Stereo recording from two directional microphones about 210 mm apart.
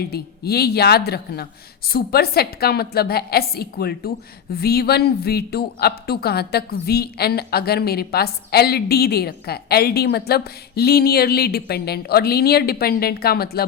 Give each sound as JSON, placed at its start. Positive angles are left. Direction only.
{"t": 0.1, "sound": "speech", "side_deg": 50}